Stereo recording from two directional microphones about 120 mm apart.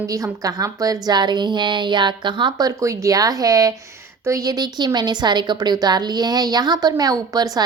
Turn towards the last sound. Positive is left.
turn(degrees=-30)  # may be behind; listen again after turning